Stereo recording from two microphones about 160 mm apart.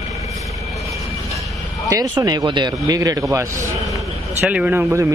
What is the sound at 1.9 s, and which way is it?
Speech, 25° right (ahead or behind).